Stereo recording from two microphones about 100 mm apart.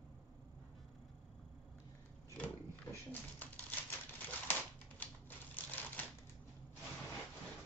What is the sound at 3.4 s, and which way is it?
Typewriter, 15° left (ahead or behind).